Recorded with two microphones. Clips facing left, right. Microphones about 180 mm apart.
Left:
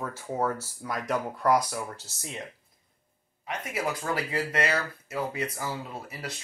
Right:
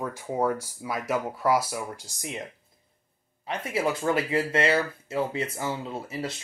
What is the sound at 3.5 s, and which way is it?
Speech, 30° right (ahead or behind).